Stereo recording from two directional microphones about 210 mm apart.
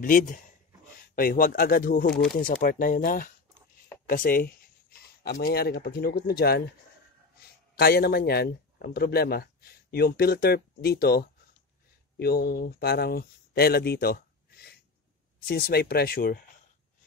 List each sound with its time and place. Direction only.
0.0 s speech: 40° left (ahead or behind)
7.7 s a man's voice: 45° left (ahead or behind)